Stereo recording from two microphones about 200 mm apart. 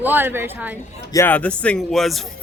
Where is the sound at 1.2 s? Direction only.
10° left (ahead or behind).